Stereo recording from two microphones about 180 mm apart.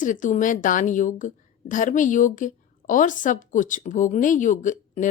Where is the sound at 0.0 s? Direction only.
45° left (ahead or behind).